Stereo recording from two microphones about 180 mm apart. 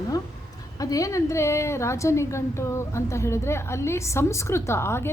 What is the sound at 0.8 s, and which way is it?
A woman's voice, 20° left (ahead or behind).